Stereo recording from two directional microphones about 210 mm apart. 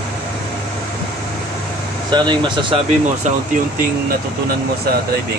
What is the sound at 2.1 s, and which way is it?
Speech, 20° right (ahead or behind).